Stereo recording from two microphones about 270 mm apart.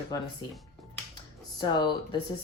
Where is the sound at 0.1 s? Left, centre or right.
Centre.